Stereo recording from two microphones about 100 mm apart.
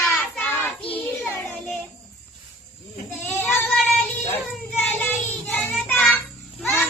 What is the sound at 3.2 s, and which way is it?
Child singing, 20° left (ahead or behind).